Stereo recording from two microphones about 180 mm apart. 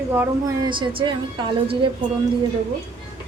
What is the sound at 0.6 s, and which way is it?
A woman's voice, 25° right (ahead or behind).